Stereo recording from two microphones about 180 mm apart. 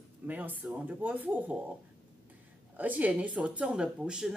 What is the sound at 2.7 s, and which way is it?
Speech, 10° right (ahead or behind).